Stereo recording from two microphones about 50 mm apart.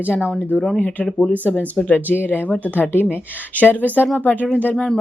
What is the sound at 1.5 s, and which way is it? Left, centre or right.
Speech, left.